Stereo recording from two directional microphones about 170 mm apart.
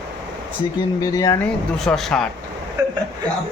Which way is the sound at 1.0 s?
20° left (ahead or behind).